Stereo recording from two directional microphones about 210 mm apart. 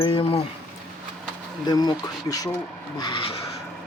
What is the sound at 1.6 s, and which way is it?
Speech, 20° left (ahead or behind).